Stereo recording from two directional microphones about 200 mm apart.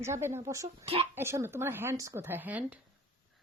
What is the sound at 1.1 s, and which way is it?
Speech, 10° right (ahead or behind).